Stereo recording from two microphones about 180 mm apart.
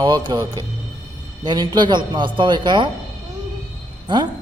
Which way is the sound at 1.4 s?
25° right (ahead or behind).